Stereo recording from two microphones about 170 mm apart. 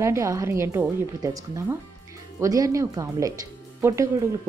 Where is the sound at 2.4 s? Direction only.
20° right (ahead or behind).